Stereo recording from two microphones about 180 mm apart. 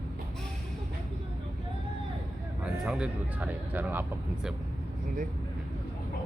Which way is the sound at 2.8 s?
5° right (ahead or behind).